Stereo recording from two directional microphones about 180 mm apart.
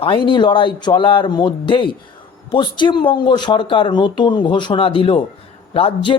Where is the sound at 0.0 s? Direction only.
30° left (ahead or behind).